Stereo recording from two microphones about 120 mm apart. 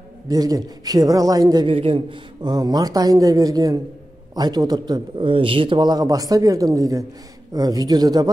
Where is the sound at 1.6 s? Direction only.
50° right (ahead or behind).